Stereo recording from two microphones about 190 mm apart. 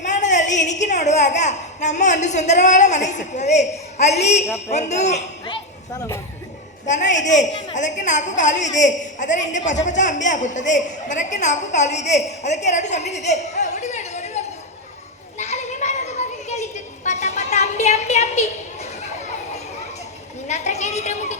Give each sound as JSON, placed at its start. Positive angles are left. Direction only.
{"t": 0.0, "sound": "a woman's voice", "side_deg": 40}
{"t": 6.8, "sound": "a woman's voice", "side_deg": 40}
{"t": 15.4, "sound": "children playing", "side_deg": 35}
{"t": 20.5, "sound": "a sound", "side_deg": 40}